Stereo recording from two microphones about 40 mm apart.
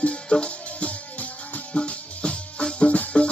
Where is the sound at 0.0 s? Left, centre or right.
Left.